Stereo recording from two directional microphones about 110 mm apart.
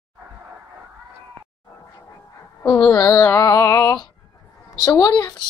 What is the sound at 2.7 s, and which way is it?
Speech, 35° left (ahead or behind).